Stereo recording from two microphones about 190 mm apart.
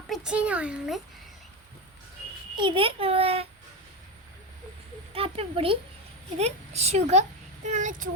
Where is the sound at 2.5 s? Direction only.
25° right (ahead or behind).